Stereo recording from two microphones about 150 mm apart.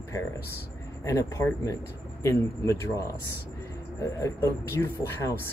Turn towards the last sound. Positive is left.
turn(degrees=20)  # may be behind; listen again after turning